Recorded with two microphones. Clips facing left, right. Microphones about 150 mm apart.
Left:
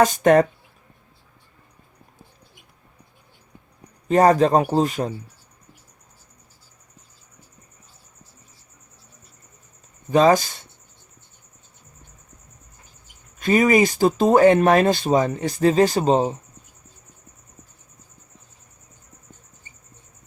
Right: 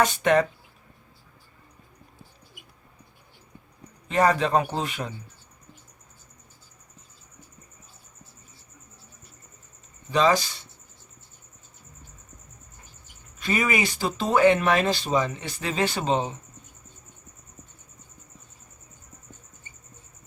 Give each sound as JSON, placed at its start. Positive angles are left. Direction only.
{"t": 0.0, "sound": "speech", "side_deg": 45}
{"t": 4.1, "sound": "speech", "side_deg": 40}
{"t": 10.1, "sound": "speech", "side_deg": 50}
{"t": 13.4, "sound": "speech", "side_deg": 45}